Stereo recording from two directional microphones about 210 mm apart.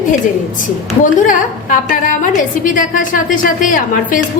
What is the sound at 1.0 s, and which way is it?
A woman's voice, 40° left (ahead or behind).